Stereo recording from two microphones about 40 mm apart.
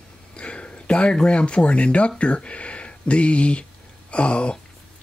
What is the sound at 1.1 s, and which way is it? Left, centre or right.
Speech, left.